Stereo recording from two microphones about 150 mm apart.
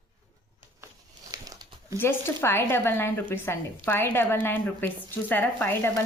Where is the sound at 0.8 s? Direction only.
25° right (ahead or behind).